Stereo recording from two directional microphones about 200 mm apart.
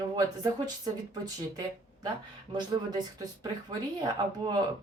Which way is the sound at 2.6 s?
20° right (ahead or behind).